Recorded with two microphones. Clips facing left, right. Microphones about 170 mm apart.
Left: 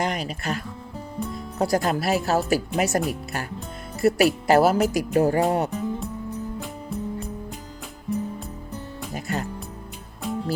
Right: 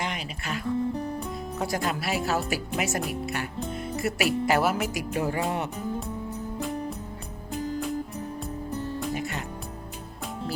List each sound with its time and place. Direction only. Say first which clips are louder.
0.0 s speech: left 6 dB; 40° left (ahead or behind)
9.1 s music: left 3 dB; 40° left (ahead or behind)